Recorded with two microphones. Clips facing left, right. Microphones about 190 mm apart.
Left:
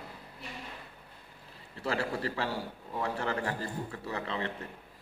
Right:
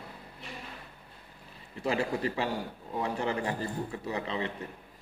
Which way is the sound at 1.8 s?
15° right (ahead or behind).